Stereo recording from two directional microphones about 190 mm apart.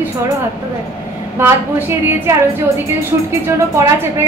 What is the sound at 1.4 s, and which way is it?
Speech, 10° right (ahead or behind).